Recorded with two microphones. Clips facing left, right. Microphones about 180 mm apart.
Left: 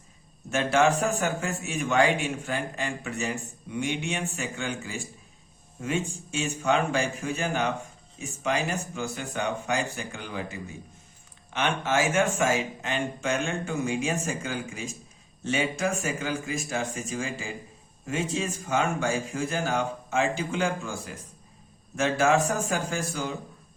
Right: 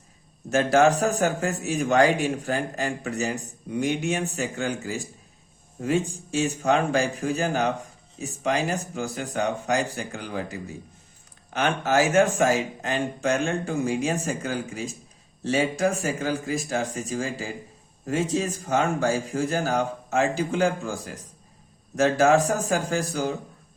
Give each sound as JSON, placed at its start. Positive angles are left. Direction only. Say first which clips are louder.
{"t": 0.5, "sound": "a man's voice", "louder": "right 4 dB", "side_deg": -40}